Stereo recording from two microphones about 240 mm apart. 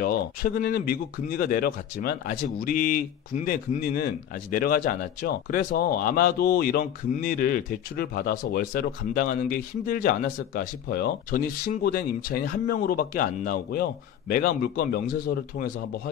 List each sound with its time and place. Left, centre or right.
0.0 s speech: left